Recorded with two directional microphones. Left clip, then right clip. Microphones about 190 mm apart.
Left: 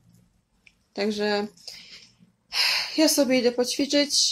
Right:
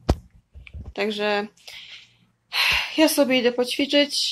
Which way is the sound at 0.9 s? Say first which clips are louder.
Right 2 dB; 15° left (ahead or behind).